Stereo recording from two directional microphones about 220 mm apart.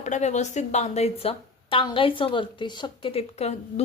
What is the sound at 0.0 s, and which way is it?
Speech, 30° left (ahead or behind).